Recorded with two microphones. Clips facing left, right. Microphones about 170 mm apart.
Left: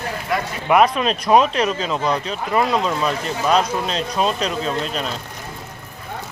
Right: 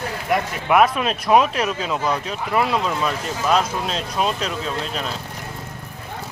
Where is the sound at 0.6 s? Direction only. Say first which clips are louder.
Left 2 dB; centre (ahead or behind).